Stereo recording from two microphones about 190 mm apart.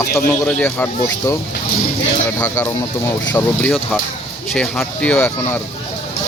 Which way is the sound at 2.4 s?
15° left (ahead or behind).